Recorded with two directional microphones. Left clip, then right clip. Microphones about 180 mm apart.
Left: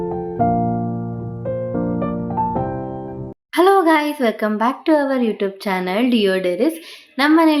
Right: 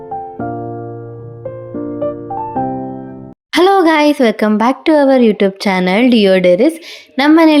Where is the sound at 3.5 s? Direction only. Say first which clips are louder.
Right 4 dB; 45° right (ahead or behind).